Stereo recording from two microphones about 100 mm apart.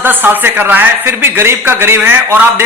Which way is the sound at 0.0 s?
20° right (ahead or behind).